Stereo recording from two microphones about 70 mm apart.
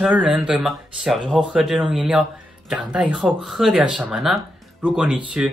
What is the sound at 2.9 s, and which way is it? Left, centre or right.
Speech, centre.